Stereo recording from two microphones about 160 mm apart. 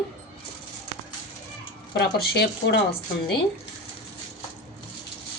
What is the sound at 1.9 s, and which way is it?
Speech, 85° left.